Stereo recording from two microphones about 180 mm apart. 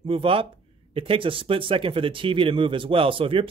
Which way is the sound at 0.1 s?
30° right (ahead or behind).